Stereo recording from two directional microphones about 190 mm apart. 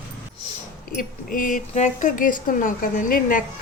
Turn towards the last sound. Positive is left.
turn(degrees=45)  # may be behind; listen again after turning